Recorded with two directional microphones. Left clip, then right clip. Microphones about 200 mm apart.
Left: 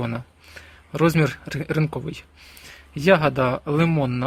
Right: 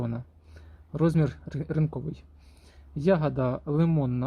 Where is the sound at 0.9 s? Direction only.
5° left (ahead or behind).